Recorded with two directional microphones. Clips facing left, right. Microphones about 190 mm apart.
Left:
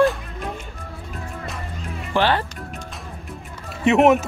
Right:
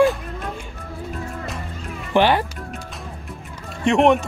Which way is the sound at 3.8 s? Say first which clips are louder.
Left 1 dB; 5° left (ahead or behind).